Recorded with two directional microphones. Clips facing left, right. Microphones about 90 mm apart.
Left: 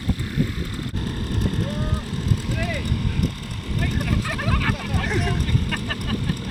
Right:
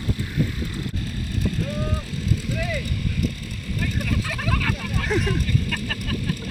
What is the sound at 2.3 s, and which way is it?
Vehicle, 60° left (ahead or behind).